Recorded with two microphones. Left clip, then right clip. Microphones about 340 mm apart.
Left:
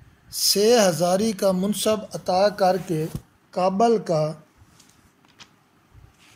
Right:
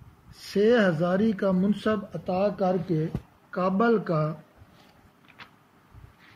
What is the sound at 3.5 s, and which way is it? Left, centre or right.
Speech, centre.